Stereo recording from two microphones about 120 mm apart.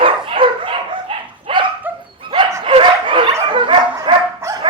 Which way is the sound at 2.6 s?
45° right (ahead or behind).